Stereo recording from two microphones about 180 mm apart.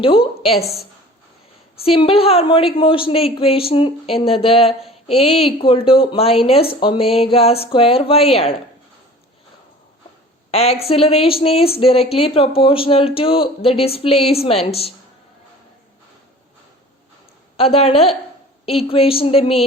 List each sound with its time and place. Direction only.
0.0 s speech: 30° left (ahead or behind)
1.8 s speech: 30° left (ahead or behind)
10.5 s speech: 35° left (ahead or behind)
17.6 s speech: 35° left (ahead or behind)